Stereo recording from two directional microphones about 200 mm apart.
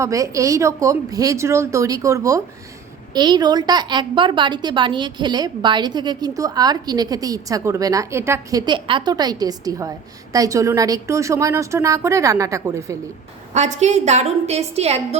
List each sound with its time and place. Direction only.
0.0 s a woman's voice: 15° right (ahead or behind)
13.5 s a woman's voice: 35° right (ahead or behind)